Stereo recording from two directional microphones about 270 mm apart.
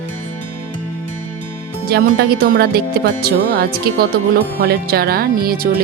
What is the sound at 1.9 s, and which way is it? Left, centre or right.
Speech, right.